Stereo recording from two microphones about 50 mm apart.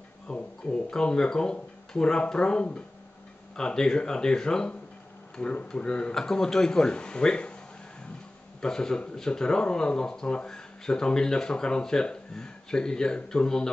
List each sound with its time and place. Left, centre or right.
0.3 s speech: centre
8.5 s speech: centre